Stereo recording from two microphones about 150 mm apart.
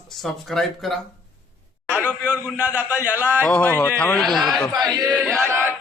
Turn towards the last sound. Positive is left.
turn(degrees=-15)  # may be behind; listen again after turning